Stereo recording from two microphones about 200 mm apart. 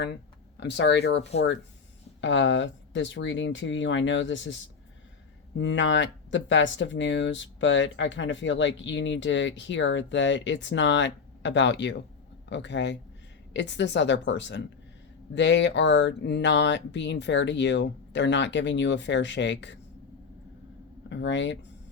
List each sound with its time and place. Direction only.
0.0 s speech: 60° left (ahead or behind)
2.2 s speech: 70° left (ahead or behind)
5.5 s speech: 65° left (ahead or behind)
21.1 s speech: 65° left (ahead or behind)